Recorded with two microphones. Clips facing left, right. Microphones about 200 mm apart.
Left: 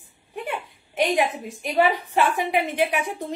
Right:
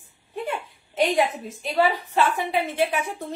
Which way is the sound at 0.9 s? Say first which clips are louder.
Even; 15° left (ahead or behind).